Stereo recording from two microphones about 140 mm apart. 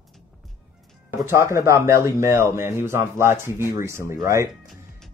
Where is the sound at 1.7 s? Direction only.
20° right (ahead or behind).